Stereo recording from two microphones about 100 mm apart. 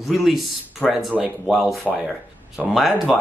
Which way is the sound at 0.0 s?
Centre (ahead or behind).